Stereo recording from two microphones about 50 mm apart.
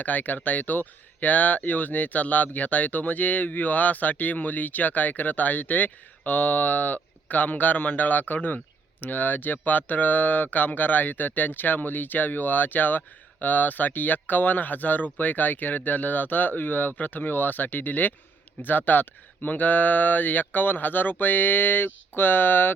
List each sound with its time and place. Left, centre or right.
0.0 s speech: left